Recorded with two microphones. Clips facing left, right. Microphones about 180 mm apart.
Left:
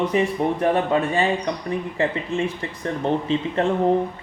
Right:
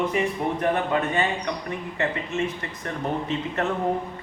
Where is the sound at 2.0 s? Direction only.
30° left (ahead or behind).